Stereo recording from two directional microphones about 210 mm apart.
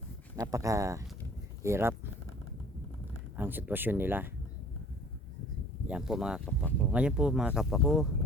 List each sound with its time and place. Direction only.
0.3 s speech: 15° right (ahead or behind)
3.3 s speech: 10° right (ahead or behind)
5.9 s speech: 5° right (ahead or behind)
6.9 s speech: 5° right (ahead or behind)